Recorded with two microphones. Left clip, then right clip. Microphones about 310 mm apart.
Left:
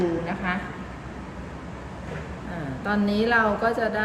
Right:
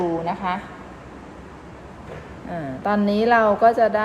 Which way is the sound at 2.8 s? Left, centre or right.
Right.